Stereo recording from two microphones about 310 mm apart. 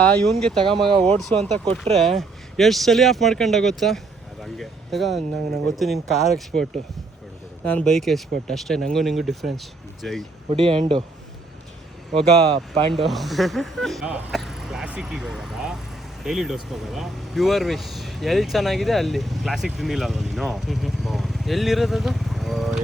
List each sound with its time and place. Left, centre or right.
0.0 s speech: centre
0.9 s speech: right
2.0 s speech: centre
10.5 s speech: centre
12.5 s speech: centre
12.9 s speech: centre